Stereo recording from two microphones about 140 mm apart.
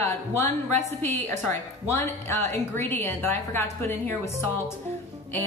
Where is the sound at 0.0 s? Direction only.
15° left (ahead or behind).